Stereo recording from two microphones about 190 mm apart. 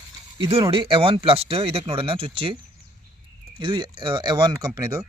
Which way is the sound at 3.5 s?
25° right (ahead or behind).